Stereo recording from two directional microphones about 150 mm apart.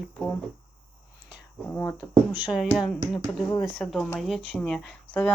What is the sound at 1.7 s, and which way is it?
Speech, 15° left (ahead or behind).